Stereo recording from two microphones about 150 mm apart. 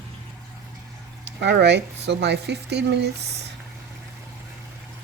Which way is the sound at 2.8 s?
90° right.